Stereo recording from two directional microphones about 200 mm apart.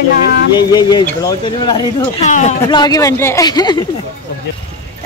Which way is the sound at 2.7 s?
20° left (ahead or behind).